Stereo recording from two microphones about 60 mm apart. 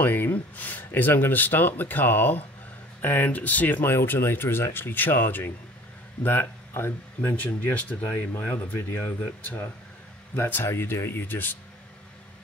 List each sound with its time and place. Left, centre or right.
0.0 s speech: left
3.8 s speech: left
7.2 s speech: left
8.3 s speech: left
10.3 s speech: left